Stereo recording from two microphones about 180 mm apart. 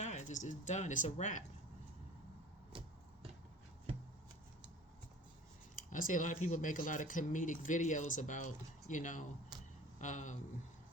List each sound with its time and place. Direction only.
0.0 s speech: 40° left (ahead or behind)
2.7 s a sound: 30° right (ahead or behind)
5.7 s speech: 50° left (ahead or behind)